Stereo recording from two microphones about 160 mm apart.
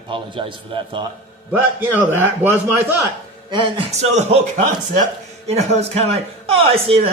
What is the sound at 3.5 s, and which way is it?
Speech, 30° right (ahead or behind).